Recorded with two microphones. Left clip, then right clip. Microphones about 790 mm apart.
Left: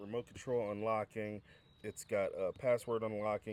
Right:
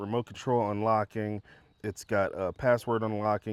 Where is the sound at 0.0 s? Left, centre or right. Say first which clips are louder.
Right 10 dB; right.